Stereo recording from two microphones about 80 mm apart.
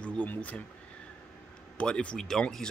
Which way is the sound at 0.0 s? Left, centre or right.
Centre.